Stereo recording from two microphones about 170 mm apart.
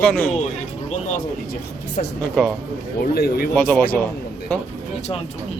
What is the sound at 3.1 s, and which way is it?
Speech, 65° left (ahead or behind).